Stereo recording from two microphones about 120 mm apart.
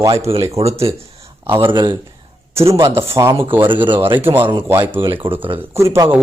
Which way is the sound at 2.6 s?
25° right (ahead or behind).